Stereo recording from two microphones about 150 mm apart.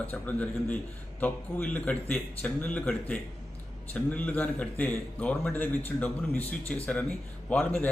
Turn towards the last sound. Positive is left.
turn(degrees=10)  # may be behind; listen again after turning